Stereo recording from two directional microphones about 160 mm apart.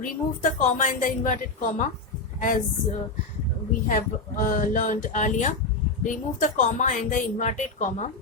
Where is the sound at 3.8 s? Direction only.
55° left (ahead or behind).